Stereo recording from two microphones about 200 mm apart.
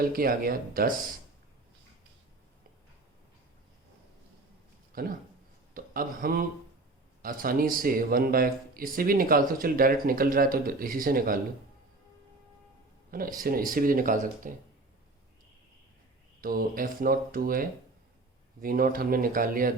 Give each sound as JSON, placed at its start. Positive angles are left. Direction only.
{"t": 0.1, "sound": "a man's voice", "side_deg": -45}
{"t": 4.9, "sound": "a man's voice", "side_deg": -45}
{"t": 13.1, "sound": "a man's voice", "side_deg": -45}
{"t": 16.4, "sound": "a man's voice", "side_deg": -45}